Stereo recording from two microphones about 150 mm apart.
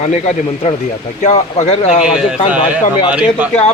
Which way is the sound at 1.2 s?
50° left (ahead or behind).